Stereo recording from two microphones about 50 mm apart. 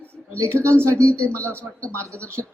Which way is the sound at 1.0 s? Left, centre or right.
Left.